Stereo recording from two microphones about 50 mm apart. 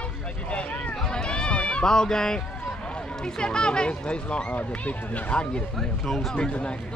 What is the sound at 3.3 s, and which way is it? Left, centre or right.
Speech, centre.